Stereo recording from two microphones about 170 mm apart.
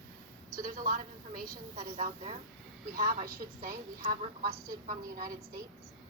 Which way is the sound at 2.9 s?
55° right (ahead or behind).